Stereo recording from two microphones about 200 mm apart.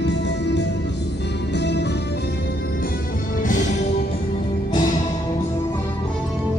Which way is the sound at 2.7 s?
45° left (ahead or behind).